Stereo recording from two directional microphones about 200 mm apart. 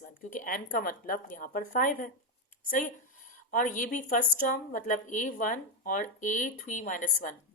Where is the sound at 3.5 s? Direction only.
40° left (ahead or behind).